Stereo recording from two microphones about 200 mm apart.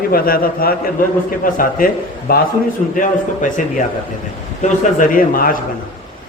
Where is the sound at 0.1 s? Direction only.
45° left (ahead or behind).